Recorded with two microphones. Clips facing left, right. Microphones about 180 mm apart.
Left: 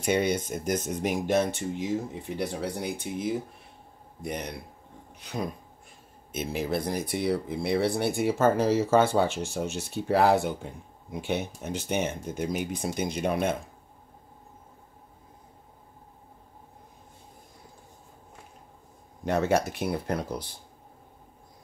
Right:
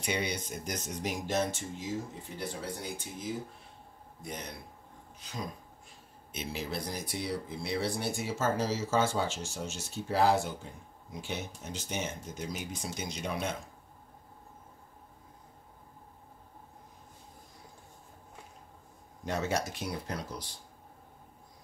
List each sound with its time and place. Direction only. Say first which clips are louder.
0.0 s speech: left 8 dB; 50° left (ahead or behind)
6.3 s speech: left 8 dB; 50° left (ahead or behind)
19.2 s speech: left 8 dB; 60° left (ahead or behind)